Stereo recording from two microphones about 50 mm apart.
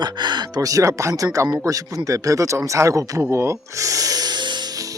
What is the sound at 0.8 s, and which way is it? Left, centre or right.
Speech, right.